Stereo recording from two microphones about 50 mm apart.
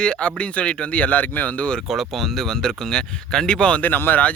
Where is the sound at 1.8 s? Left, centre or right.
Centre.